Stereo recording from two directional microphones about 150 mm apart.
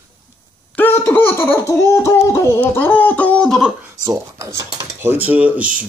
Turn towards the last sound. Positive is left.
turn(degrees=-10)  # may be behind; listen again after turning